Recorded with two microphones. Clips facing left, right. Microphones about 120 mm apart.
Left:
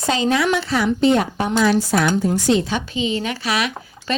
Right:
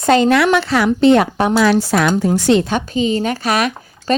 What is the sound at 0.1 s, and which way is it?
A woman's voice, 65° right (ahead or behind).